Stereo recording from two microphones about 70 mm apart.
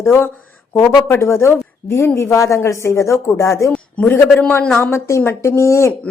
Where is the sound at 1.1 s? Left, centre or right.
Left.